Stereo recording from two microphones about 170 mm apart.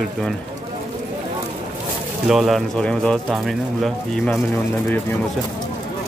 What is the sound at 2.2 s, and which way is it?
Speech, centre (ahead or behind).